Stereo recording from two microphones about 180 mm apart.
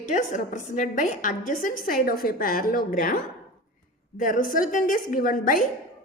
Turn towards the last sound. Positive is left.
turn(degrees=50)  # may be behind; listen again after turning